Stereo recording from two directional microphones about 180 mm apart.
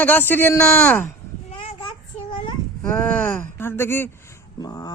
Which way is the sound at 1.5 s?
30° left (ahead or behind).